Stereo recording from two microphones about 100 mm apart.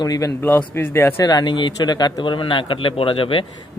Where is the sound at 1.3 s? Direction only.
50° left (ahead or behind).